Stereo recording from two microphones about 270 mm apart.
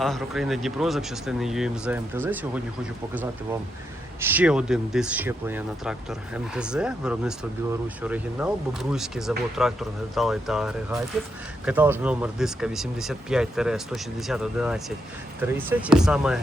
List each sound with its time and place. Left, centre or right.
0.0 s speech: centre
4.2 s speech: centre